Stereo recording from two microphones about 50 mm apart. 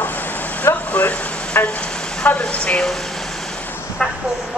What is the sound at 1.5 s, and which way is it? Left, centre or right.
Vehicle, left.